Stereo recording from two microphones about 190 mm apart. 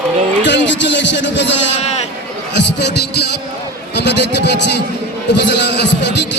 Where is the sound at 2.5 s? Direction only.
65° left (ahead or behind).